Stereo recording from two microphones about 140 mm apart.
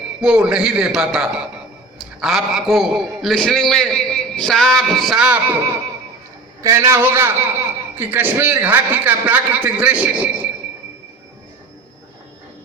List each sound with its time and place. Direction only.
0.2 s a man's voice: 10° right (ahead or behind)
6.6 s a man's voice: 20° right (ahead or behind)